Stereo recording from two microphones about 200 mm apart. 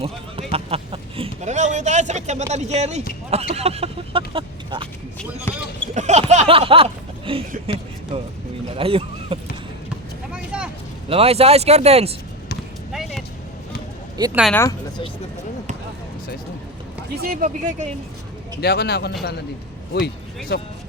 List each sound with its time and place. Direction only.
0.0 s a sound: 30° right (ahead or behind)
2.5 s speech: 35° right (ahead or behind)
4.3 s chicken: 25° right (ahead or behind)
5.5 s basketball bounce: 10° left (ahead or behind)
5.9 s a sound: 35° right (ahead or behind)
8.1 s speech: 30° right (ahead or behind)
8.7 s a sound: 30° right (ahead or behind)
10.3 s vehicle: 5° right (ahead or behind)
11.1 s speech: 30° right (ahead or behind)
12.9 s a sound: centre (ahead or behind)
14.5 s speech: 15° left (ahead or behind)
17.2 s speech: 45° right (ahead or behind)
18.6 s speech: 55° left (ahead or behind)
20.5 s speech: 55° left (ahead or behind)